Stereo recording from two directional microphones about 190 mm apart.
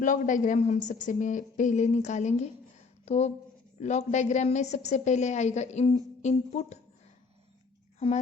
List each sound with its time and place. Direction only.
0.0 s speech: 45° left (ahead or behind)
7.9 s speech: 35° left (ahead or behind)